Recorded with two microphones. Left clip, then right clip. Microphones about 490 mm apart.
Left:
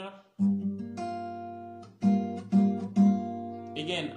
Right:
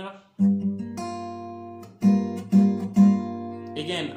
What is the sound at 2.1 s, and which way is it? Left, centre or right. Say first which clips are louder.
Guitar: right 4 dB; left.